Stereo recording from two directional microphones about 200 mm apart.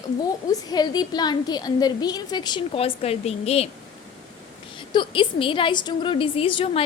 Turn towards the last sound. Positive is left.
turn(degrees=25)  # may be behind; listen again after turning